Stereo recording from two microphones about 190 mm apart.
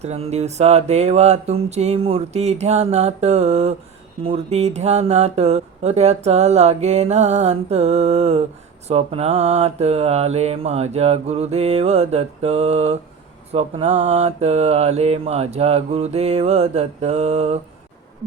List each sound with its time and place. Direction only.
0.0 s speech: 35° right (ahead or behind)